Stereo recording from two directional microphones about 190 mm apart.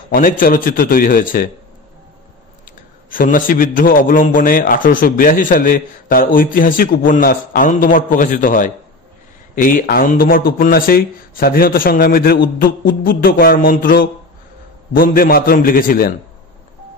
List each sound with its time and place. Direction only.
0.1 s a man's voice: 45° left (ahead or behind)
3.1 s a man's voice: 45° left (ahead or behind)